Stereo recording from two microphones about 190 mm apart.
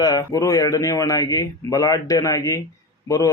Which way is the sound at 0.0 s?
20° left (ahead or behind).